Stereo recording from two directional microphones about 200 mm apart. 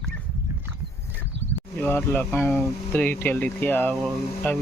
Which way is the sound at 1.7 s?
10° left (ahead or behind).